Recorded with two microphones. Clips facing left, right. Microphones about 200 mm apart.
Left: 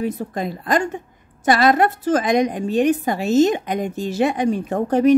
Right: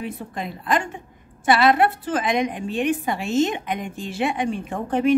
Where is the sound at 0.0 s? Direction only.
40° left (ahead or behind).